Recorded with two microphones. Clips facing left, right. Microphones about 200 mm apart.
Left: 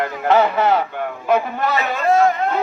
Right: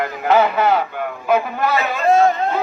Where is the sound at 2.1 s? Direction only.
25° right (ahead or behind).